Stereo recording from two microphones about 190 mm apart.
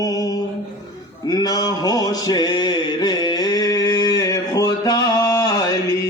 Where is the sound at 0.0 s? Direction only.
20° left (ahead or behind).